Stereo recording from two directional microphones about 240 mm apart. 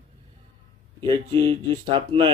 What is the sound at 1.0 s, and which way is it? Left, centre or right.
Speech, right.